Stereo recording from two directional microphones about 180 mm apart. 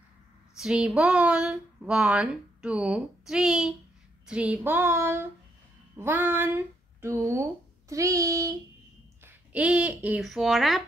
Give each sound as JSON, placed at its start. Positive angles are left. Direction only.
{"t": 0.6, "sound": "speech", "side_deg": -5}
{"t": 4.3, "sound": "child singing", "side_deg": -5}
{"t": 5.9, "sound": "speech", "side_deg": -10}
{"t": 7.9, "sound": "child singing", "side_deg": -20}
{"t": 9.2, "sound": "speech", "side_deg": -10}